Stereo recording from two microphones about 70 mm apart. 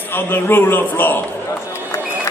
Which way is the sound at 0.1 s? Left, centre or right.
Left.